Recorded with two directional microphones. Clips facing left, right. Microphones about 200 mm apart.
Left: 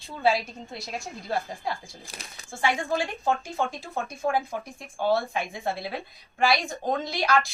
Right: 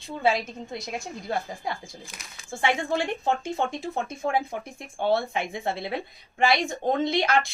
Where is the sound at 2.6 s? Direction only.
25° right (ahead or behind).